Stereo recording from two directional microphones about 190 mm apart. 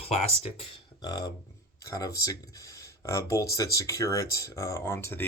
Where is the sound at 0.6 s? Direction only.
20° left (ahead or behind).